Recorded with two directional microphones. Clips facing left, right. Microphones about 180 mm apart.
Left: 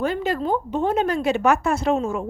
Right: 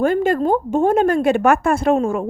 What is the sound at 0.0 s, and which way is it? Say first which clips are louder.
A woman's voice: right 7 dB; 50° right (ahead or behind).